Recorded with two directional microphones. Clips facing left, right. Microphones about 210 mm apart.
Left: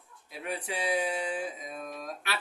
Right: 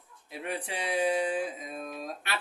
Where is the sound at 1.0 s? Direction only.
30° right (ahead or behind).